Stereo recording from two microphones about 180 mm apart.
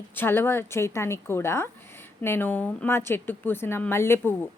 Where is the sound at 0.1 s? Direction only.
10° left (ahead or behind).